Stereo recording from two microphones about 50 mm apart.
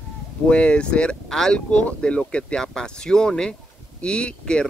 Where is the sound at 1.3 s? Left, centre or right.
Centre.